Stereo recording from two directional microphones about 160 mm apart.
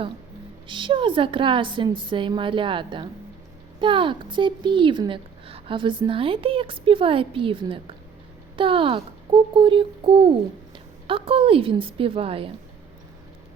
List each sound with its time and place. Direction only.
0.7 s a child's voice: 30° right (ahead or behind)